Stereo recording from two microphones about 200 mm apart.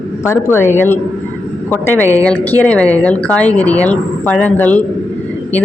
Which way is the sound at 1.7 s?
10° left (ahead or behind).